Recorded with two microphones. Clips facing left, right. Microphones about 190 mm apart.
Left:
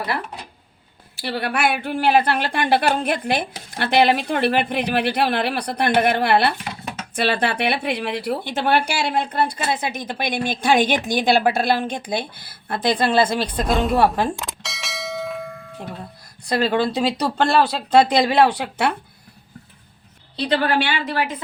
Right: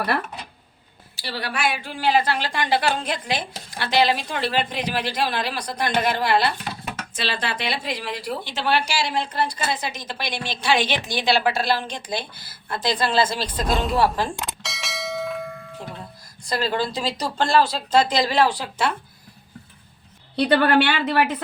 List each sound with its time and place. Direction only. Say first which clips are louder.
1.1 s a woman's voice: left 5 dB; 55° left (ahead or behind)
13.7 s speech: left 3 dB; centre (ahead or behind)
14.4 s bell: even; centre (ahead or behind)
16.4 s a woman's voice: left 5 dB; 60° left (ahead or behind)
20.3 s a woman's voice: right 3 dB; 60° right (ahead or behind)